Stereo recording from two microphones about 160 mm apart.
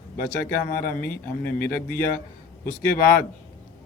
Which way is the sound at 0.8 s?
60° left (ahead or behind).